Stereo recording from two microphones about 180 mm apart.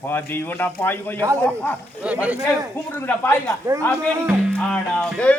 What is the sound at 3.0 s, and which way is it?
A man's voice, 10° left (ahead or behind).